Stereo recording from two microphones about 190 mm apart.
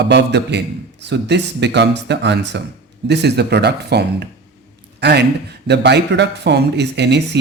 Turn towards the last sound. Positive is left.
turn(degrees=-65)  # may be behind; listen again after turning